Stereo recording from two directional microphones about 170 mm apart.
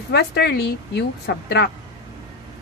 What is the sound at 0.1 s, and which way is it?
A woman's voice, 75° left (ahead or behind).